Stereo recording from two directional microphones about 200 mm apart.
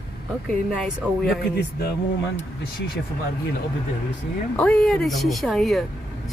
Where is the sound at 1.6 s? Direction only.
55° left (ahead or behind).